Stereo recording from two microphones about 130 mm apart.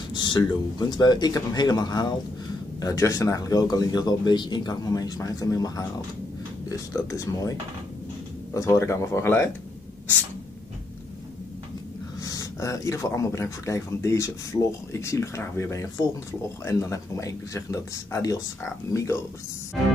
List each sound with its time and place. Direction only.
0.1 s speech: 35° left (ahead or behind)
8.5 s speech: 20° left (ahead or behind)
12.2 s speech: 25° left (ahead or behind)